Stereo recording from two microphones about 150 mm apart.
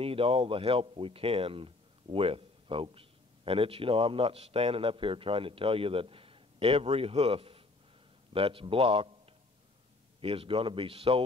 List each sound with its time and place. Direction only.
0.0 s speech: 40° right (ahead or behind)
10.2 s speech: 40° right (ahead or behind)